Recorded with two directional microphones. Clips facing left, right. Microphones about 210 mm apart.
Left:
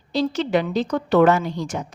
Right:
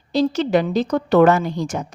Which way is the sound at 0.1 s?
40° right (ahead or behind).